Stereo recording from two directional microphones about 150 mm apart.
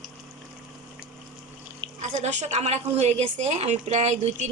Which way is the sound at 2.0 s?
55° right (ahead or behind).